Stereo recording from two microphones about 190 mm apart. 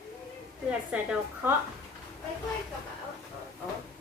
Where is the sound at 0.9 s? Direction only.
5° right (ahead or behind).